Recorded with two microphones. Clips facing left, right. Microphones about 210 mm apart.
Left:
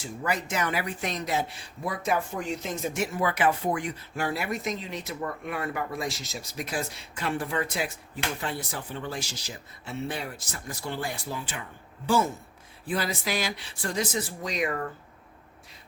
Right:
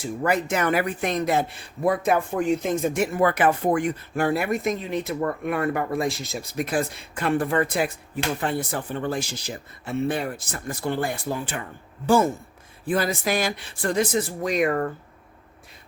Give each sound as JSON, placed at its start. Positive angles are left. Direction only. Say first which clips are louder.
{"t": 0.0, "sound": "speech", "louder": "right 7 dB", "side_deg": -55}